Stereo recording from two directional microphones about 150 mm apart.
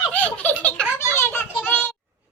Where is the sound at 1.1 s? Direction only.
15° left (ahead or behind).